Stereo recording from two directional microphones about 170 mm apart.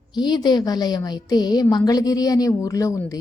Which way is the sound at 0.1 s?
25° left (ahead or behind).